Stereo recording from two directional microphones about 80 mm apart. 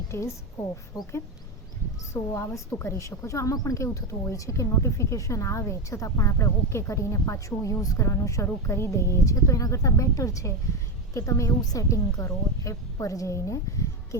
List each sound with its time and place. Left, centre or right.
0.9 s speech: left
2.1 s speech: left
3.8 s speech: left